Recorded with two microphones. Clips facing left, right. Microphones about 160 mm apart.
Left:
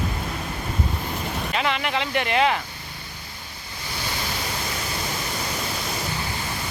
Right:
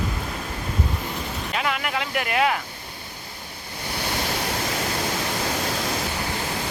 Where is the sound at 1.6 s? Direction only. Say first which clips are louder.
Left 1 dB; 5° right (ahead or behind).